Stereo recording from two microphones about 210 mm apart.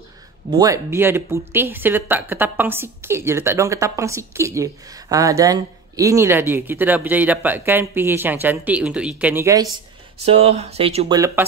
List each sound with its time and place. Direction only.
0.5 s speech: 15° right (ahead or behind)
10.2 s speech: 30° right (ahead or behind)
11.1 s speech: 15° right (ahead or behind)